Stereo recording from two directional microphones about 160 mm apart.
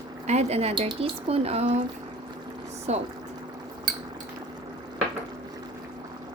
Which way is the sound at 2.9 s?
45° right (ahead or behind).